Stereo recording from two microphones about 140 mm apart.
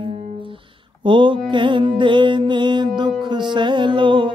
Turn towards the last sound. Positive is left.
turn(degrees=-35)  # may be behind; listen again after turning